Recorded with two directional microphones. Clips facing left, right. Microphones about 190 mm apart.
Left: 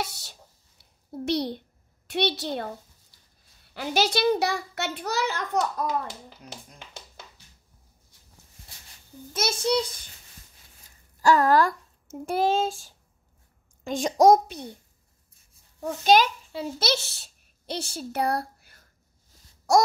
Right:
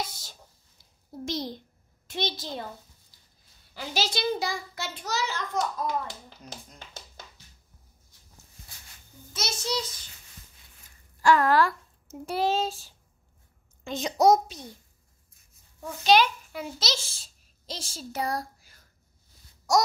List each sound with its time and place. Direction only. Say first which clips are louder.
0.7 s a sound: left 4 dB; 65° left (ahead or behind)
2.0 s a child's voice: left 6 dB; 70° left (ahead or behind)
3.7 s a child's voice: left 6 dB; 60° left (ahead or behind)
6.4 s tap: left 1 dB; 10° left (ahead or behind)
9.3 s a child's voice: left 7 dB; 55° left (ahead or behind)
11.1 s a child's voice: left 2 dB; 40° left (ahead or behind); by 14.8 s 60° left (ahead or behind)
15.8 s a child's voice: left 2 dB; 45° left (ahead or behind)
16.8 s a child's voice: left 6 dB; 65° left (ahead or behind)